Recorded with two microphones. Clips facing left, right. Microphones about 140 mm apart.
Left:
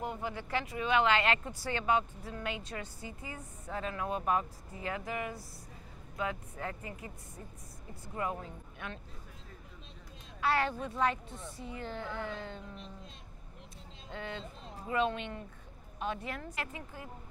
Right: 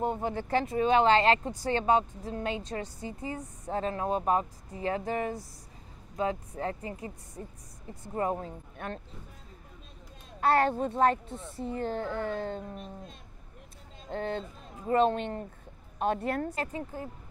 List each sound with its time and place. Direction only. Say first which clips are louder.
0.0 s speech: right 7 dB; 30° right (ahead or behind)
10.4 s speech: right 6 dB; 45° right (ahead or behind)
16.5 s speech: right 7 dB; 35° right (ahead or behind)